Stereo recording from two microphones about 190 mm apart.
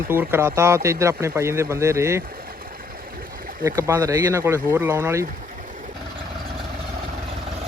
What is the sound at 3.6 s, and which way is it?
Speech, 15° right (ahead or behind).